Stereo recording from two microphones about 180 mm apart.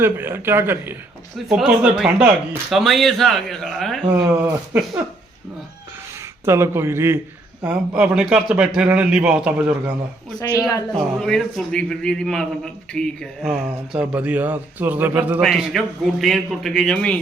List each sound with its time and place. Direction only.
0.0 s a man's voice: 10° right (ahead or behind)
4.2 s a man's voice: 10° right (ahead or behind)
6.4 s a man's voice: 15° right (ahead or behind)
10.6 s a woman's voice: 20° left (ahead or behind)
10.9 s a man's voice: centre (ahead or behind)